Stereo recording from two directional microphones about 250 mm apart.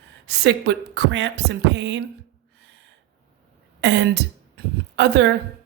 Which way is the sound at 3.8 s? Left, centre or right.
Right.